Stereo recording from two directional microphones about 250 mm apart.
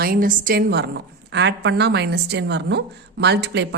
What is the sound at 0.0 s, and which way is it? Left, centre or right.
A woman's voice, right.